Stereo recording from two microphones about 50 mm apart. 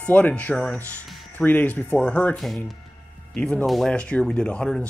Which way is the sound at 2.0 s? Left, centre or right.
Left.